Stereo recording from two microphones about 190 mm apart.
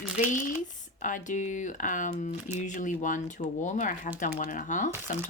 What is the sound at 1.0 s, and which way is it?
Speech, 40° left (ahead or behind).